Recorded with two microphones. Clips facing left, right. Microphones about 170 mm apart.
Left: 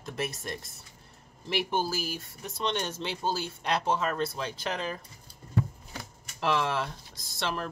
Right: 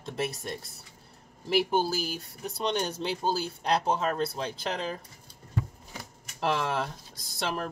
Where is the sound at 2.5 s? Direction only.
35° right (ahead or behind).